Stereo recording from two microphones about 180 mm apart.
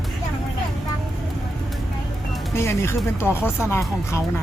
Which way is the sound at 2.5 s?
15° left (ahead or behind).